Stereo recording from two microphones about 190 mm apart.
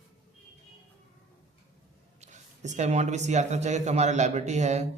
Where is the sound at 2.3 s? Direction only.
40° right (ahead or behind).